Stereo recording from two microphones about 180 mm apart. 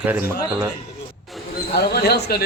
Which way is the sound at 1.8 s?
60° left (ahead or behind).